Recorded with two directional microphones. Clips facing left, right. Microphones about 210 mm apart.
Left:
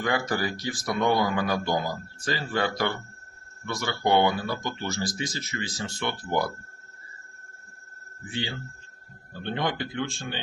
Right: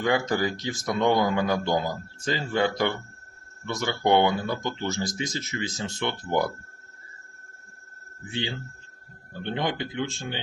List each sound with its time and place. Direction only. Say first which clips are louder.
0.0 s a man's voice: right 3 dB; 20° right (ahead or behind)
9.4 s speech: right 1 dB; 15° right (ahead or behind)